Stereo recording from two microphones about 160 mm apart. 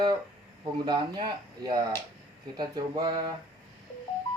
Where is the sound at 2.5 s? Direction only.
25° right (ahead or behind).